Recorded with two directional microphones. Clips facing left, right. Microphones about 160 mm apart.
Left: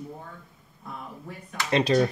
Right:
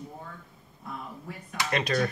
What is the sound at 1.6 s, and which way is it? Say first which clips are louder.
Speech: left 6 dB; 25° left (ahead or behind).